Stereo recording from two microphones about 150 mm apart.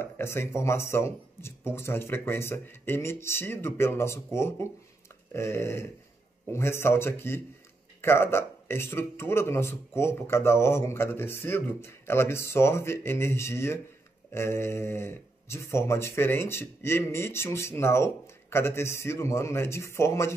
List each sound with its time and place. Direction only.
0.0 s speech: 15° left (ahead or behind)